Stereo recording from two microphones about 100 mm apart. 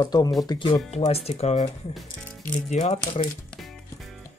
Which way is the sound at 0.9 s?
90° left.